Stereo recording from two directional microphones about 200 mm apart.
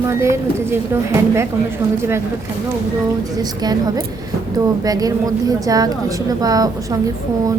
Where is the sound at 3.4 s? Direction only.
20° right (ahead or behind).